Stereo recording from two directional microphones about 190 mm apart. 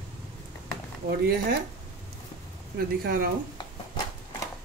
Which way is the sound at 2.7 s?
50° right (ahead or behind).